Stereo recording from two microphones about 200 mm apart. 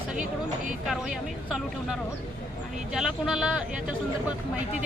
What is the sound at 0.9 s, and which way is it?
Speech, centre (ahead or behind).